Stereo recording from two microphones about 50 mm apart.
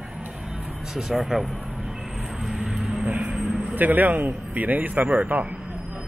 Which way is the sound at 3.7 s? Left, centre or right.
Right.